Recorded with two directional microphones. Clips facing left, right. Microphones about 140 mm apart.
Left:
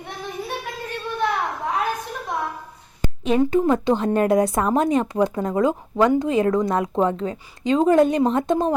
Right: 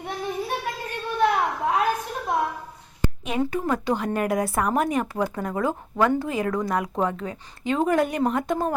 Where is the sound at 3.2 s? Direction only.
25° left (ahead or behind).